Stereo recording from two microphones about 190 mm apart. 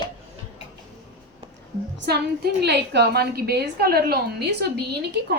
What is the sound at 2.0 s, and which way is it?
A woman's voice, 60° right (ahead or behind).